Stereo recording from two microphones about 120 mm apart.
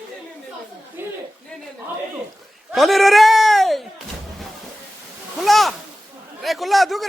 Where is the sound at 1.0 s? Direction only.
15° right (ahead or behind).